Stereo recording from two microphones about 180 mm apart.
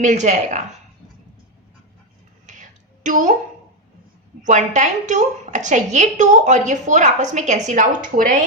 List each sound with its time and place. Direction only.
0.0 s speech: 40° right (ahead or behind)
2.5 s a sound: 45° right (ahead or behind)
4.4 s a woman's voice: 40° right (ahead or behind)